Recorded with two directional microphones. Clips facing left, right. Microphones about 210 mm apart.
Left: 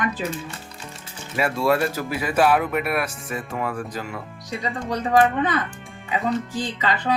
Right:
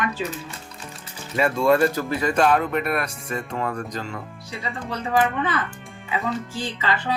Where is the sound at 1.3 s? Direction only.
5° left (ahead or behind).